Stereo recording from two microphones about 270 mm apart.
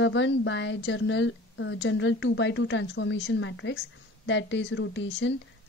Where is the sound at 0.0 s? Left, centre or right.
Left.